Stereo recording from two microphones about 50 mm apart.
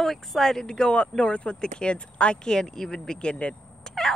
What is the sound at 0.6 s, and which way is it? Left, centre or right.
Speech, centre.